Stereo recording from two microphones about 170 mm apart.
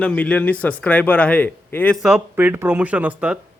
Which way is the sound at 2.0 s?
10° right (ahead or behind).